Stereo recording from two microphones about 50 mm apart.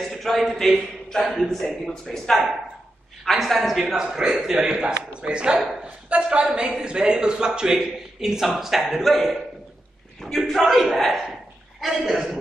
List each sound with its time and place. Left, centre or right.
0.0 s a man's voice: centre
4.0 s a man's voice: centre